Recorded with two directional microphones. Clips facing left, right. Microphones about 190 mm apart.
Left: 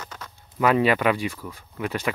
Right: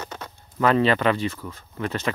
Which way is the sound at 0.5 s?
10° left (ahead or behind).